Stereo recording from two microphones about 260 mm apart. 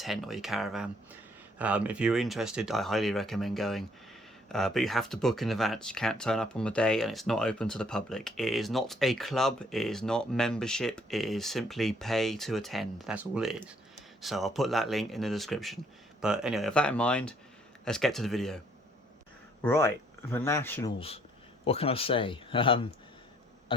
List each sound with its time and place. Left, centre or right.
0.0 s speech: centre
19.6 s speech: centre
21.6 s speech: left